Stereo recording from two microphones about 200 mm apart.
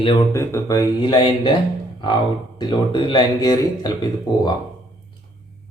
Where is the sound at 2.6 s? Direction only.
20° left (ahead or behind).